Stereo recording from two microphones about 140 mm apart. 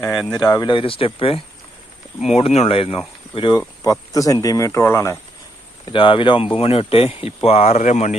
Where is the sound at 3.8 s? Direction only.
25° left (ahead or behind).